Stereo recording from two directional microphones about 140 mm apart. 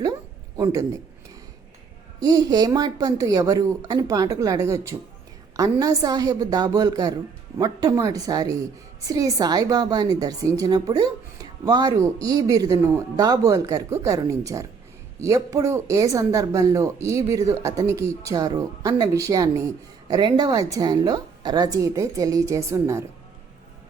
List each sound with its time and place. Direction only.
0.5 s a man's voice: 25° right (ahead or behind)
2.2 s speech: 25° right (ahead or behind)